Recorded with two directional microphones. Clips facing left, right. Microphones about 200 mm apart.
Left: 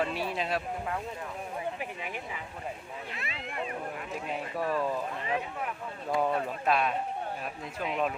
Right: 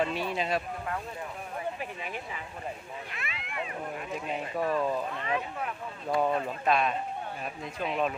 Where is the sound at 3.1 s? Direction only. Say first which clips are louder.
Left 1 dB; 35° left (ahead or behind).